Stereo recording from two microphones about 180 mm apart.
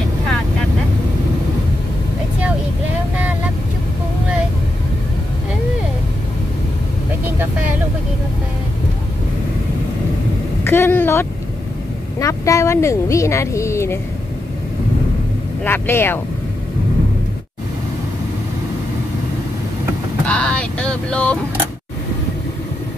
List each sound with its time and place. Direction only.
10.6 s vehicle: 15° left (ahead or behind)
12.2 s a sound: 15° left (ahead or behind)
15.6 s speech: 10° left (ahead or behind)
20.2 s vehicle: 5° left (ahead or behind)